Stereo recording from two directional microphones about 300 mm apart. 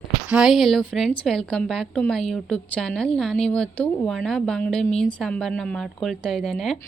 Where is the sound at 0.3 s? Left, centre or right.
Centre.